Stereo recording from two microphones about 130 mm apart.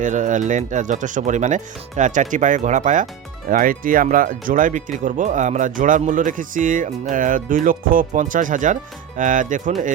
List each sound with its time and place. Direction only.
0.0 s speech: 75° right (ahead or behind)
3.5 s speech: 90° right